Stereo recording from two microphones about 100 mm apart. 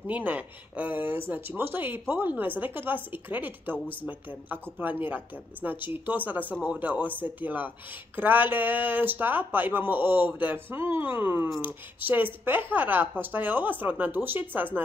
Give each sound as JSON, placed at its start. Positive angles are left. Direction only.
{"t": 0.0, "sound": "a woman's voice", "side_deg": -15}